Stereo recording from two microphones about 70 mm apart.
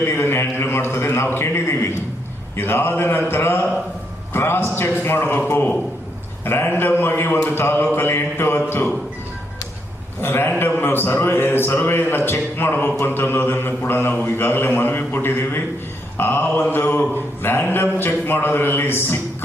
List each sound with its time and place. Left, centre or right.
0.0 s a man's voice: left
5.5 s mantra: left
6.4 s a man's voice: left
10.2 s a man's voice: left
16.1 s mantra: left
17.4 s a man's voice: left